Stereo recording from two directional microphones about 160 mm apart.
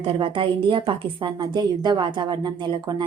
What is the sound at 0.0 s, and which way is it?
A woman's voice, 35° right (ahead or behind).